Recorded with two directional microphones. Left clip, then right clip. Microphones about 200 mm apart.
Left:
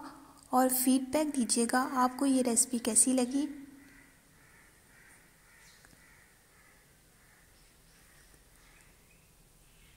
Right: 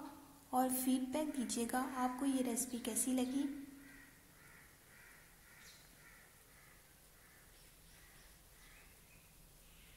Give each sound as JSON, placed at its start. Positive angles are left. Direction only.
{"t": 0.5, "sound": "a woman's voice", "side_deg": 40}